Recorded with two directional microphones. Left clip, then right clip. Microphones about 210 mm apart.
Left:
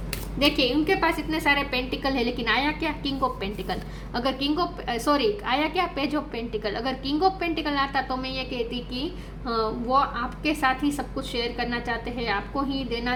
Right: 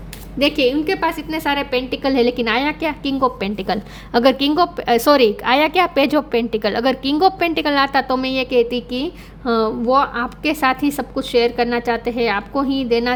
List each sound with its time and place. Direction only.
0.3 s a woman's voice: 45° right (ahead or behind)